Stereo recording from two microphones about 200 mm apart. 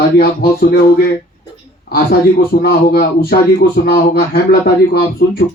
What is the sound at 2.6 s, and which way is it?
Speech, 50° left (ahead or behind).